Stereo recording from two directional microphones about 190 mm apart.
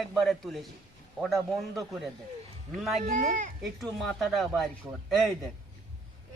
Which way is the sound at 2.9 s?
40° right (ahead or behind).